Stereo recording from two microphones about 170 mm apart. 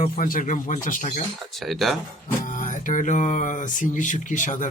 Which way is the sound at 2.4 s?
50° left (ahead or behind).